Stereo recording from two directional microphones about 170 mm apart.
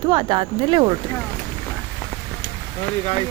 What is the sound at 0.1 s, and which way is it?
Speech, 30° right (ahead or behind).